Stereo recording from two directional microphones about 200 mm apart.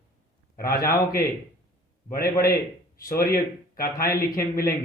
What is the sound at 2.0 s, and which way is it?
Speech, 50° left (ahead or behind).